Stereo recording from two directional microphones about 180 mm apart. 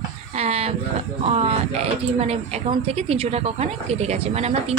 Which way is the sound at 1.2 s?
35° right (ahead or behind).